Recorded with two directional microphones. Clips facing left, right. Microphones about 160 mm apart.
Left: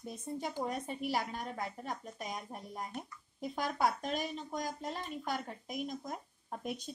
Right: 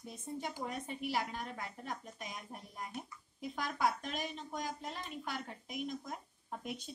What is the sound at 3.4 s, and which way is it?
Speech, 40° left (ahead or behind).